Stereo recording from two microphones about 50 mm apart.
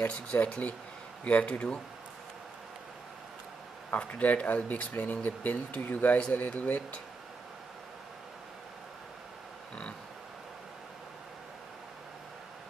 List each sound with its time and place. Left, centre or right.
0.1 s speech: left
4.1 s speech: left